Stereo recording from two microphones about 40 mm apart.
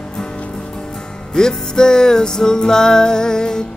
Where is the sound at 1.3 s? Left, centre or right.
Centre.